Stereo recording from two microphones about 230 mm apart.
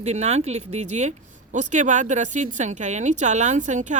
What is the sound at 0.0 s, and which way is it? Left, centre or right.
Speech, right.